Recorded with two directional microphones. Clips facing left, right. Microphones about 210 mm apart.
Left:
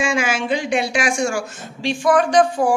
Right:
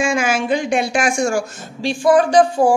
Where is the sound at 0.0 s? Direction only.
45° right (ahead or behind).